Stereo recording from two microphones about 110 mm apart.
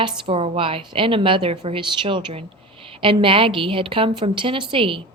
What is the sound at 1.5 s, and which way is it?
A woman's voice, 65° right (ahead or behind).